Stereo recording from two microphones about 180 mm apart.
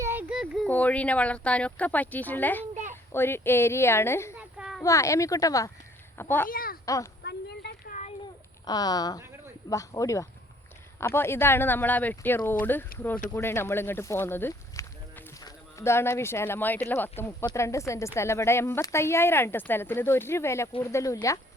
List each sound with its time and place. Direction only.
0.0 s speech: 10° right (ahead or behind); by 4.4 s 15° left (ahead or behind)
4.4 s a sound: 5° right (ahead or behind)
4.8 s speech: 15° left (ahead or behind)
6.5 s speech: 55° left (ahead or behind)
6.8 s speech: 20° left (ahead or behind)
7.2 s a sound: 65° left (ahead or behind)
8.6 s a woman's voice: 20° left (ahead or behind)